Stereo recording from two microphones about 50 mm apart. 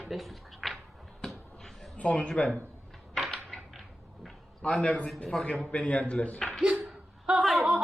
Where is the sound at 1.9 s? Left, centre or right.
Left.